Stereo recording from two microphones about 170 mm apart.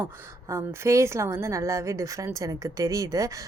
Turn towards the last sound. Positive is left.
turn(degrees=-20)  # may be behind; listen again after turning